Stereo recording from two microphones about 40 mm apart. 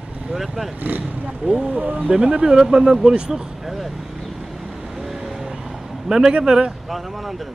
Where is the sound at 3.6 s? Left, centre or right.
Centre.